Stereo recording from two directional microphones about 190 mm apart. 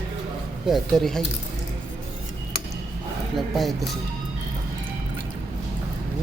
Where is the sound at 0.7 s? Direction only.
Centre (ahead or behind).